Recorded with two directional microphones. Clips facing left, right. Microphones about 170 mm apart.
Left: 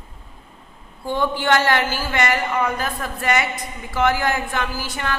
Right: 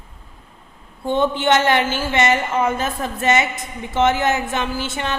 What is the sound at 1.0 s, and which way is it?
A woman's voice, 20° right (ahead or behind).